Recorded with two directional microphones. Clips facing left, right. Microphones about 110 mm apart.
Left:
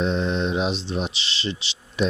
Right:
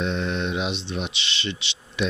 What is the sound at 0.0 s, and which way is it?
Speech, 35° left (ahead or behind).